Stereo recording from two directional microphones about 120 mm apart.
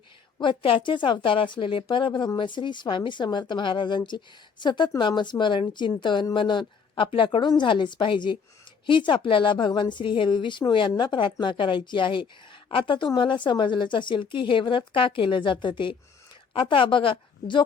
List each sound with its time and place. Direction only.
0.3 s a woman's voice: 45° left (ahead or behind)